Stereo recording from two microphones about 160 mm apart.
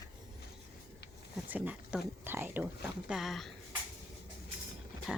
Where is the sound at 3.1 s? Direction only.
Centre (ahead or behind).